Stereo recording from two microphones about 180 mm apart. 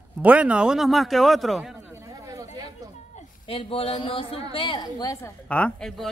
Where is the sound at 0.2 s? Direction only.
10° right (ahead or behind).